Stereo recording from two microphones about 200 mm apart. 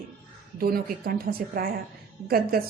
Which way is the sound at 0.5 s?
45° right (ahead or behind).